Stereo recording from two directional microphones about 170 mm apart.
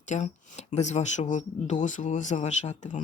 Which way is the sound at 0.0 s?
45° left (ahead or behind).